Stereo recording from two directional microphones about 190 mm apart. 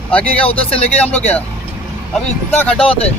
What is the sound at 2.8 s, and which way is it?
Speech, 30° left (ahead or behind).